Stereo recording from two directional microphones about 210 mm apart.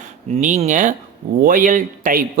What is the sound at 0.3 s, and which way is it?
Speech, 35° right (ahead or behind).